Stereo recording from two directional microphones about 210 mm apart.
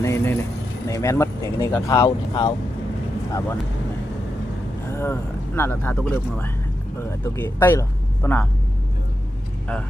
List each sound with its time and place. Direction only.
0.0 s vehicle: 15° left (ahead or behind)
0.9 s speech: 15° left (ahead or behind)
4.9 s speech: 10° left (ahead or behind)